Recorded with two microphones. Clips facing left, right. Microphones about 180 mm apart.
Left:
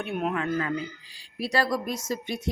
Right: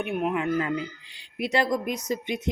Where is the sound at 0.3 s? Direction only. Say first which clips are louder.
Right 2 dB; 15° right (ahead or behind).